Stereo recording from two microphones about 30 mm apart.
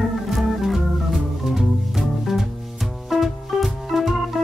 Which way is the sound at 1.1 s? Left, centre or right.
Centre.